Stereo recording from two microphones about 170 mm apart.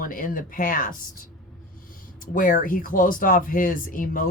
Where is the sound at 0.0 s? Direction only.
55° left (ahead or behind).